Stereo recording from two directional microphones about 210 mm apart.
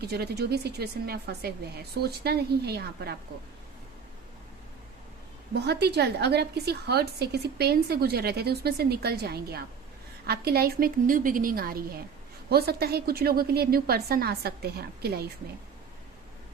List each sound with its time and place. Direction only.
0.0 s a woman's voice: 50° right (ahead or behind)
5.5 s a woman's voice: 55° right (ahead or behind)